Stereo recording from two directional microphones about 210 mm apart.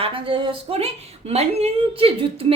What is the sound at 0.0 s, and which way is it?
A woman's voice, 25° right (ahead or behind).